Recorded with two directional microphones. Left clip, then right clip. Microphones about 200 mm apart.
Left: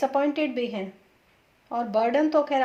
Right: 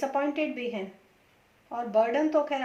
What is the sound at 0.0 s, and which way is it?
A woman's voice, 40° left (ahead or behind).